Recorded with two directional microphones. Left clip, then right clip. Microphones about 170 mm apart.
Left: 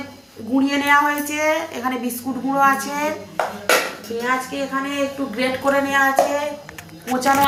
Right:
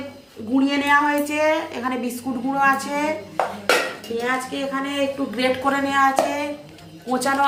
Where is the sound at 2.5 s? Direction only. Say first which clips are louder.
Left 2 dB; 20° right (ahead or behind).